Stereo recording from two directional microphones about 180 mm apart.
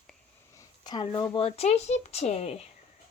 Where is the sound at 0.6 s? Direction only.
25° left (ahead or behind).